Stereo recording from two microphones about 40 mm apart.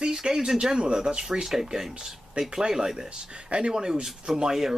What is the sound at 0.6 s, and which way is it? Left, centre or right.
Speech, right.